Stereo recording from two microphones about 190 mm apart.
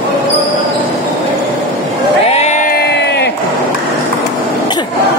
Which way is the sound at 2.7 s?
55° left (ahead or behind).